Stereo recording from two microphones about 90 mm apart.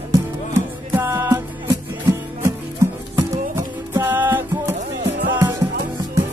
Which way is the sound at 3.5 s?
25° right (ahead or behind).